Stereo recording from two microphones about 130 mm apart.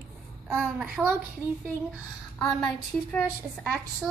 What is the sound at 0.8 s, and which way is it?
Speech, 10° right (ahead or behind).